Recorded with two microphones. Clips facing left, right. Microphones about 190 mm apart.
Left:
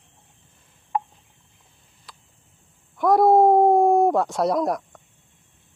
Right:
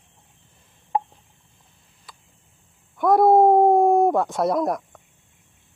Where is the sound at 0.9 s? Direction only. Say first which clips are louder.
Right 2 dB; 25° right (ahead or behind).